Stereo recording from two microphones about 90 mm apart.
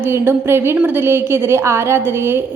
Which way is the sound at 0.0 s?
25° right (ahead or behind).